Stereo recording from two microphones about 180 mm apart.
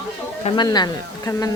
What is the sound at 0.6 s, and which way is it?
Speech, 20° left (ahead or behind).